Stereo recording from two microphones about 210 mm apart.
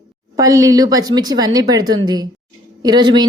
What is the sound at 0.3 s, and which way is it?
A woman's voice, 15° right (ahead or behind).